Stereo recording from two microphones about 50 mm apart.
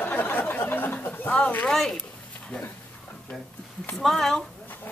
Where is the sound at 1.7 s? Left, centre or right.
Centre.